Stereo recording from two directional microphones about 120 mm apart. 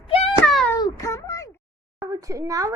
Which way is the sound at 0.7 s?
25° left (ahead or behind).